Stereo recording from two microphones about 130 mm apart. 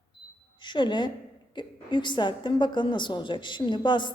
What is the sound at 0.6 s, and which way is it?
A woman's voice, 40° left (ahead or behind).